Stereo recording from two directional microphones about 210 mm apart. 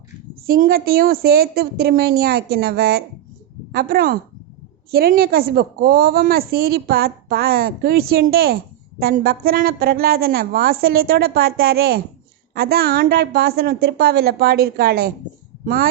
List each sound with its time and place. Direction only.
0.4 s a woman's voice: 45° right (ahead or behind)